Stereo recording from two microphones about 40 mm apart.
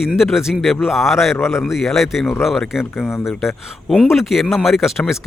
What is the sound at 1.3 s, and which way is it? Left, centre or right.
Speech, left.